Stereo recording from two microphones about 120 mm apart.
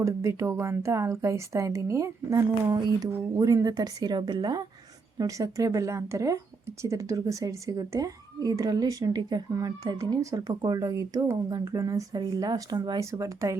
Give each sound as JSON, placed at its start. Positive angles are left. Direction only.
{"t": 0.0, "sound": "speech", "side_deg": -25}
{"t": 2.7, "sound": "speech", "side_deg": -35}
{"t": 3.1, "sound": "speech", "side_deg": -25}